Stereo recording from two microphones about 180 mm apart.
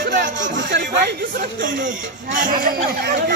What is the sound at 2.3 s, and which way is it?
Speech, 50° right (ahead or behind).